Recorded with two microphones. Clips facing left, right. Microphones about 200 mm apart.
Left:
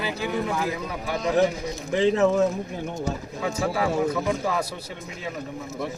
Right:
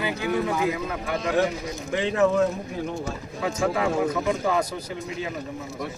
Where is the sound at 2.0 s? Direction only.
20° left (ahead or behind).